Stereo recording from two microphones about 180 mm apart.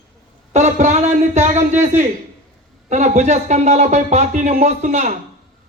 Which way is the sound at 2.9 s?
40° right (ahead or behind).